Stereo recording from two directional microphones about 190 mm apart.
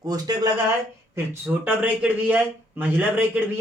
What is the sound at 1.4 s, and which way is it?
Speech, 5° right (ahead or behind).